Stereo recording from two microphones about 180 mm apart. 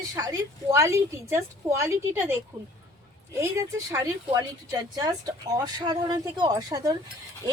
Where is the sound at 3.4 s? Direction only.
15° right (ahead or behind).